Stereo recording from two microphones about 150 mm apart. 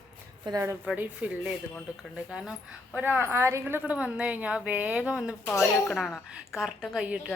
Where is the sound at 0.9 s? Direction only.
10° right (ahead or behind).